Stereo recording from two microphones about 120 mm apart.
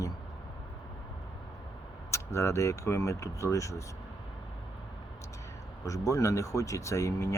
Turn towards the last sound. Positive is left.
turn(degrees=25)  # may be behind; listen again after turning